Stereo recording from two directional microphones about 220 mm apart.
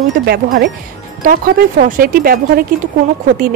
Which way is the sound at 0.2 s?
40° right (ahead or behind).